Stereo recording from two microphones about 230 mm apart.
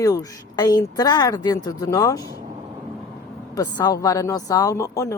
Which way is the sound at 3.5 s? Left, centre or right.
Centre.